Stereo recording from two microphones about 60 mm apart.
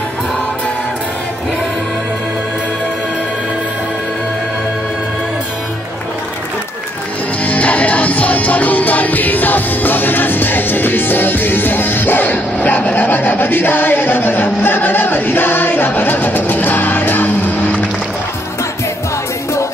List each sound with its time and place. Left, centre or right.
7.4 s music: left